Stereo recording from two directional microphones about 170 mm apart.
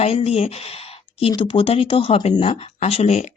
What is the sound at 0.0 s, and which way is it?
Speech, 35° left (ahead or behind).